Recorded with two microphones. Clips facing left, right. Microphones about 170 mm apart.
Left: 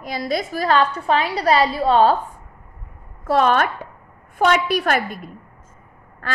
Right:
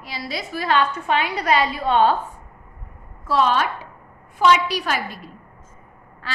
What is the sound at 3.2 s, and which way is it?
A woman's voice, 55° left (ahead or behind).